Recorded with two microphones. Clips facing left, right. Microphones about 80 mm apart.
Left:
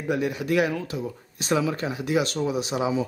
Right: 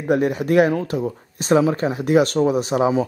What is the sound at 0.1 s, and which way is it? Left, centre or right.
Speech, right.